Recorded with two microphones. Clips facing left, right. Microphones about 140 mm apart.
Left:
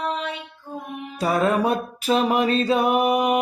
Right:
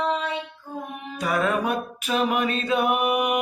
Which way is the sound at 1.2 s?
35° left (ahead or behind).